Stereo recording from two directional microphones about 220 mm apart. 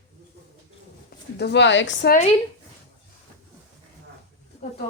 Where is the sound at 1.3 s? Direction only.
50° left (ahead or behind).